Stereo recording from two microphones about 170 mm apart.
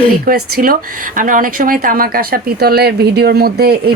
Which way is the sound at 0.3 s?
60° right (ahead or behind).